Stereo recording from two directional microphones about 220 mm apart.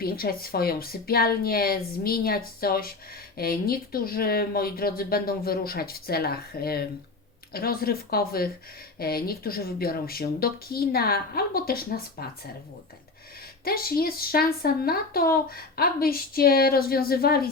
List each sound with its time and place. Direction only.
0.0 s speech: 45° left (ahead or behind)
13.7 s speech: 45° left (ahead or behind)